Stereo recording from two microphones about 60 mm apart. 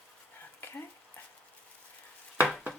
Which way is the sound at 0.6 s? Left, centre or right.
Left.